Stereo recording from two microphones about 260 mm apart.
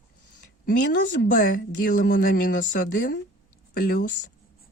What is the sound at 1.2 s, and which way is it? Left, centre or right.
Speech, left.